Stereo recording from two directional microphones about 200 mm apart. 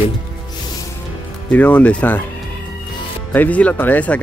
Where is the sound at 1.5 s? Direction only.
5° left (ahead or behind).